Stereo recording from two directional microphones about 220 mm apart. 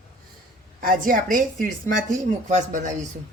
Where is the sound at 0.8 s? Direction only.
40° right (ahead or behind).